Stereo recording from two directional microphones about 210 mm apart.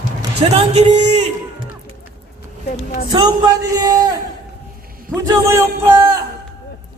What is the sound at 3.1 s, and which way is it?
Speech, 20° right (ahead or behind).